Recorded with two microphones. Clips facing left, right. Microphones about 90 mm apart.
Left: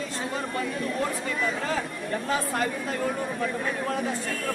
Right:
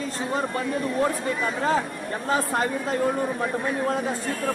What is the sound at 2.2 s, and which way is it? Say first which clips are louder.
Speech: right 4 dB; 30° right (ahead or behind).